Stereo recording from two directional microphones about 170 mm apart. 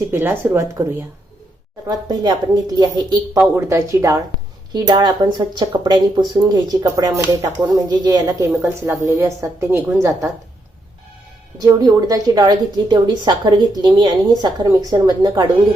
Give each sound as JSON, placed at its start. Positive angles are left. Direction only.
{"t": 0.1, "sound": "speech", "side_deg": -15}
{"t": 1.9, "sound": "speech", "side_deg": -25}
{"t": 11.5, "sound": "speech", "side_deg": -25}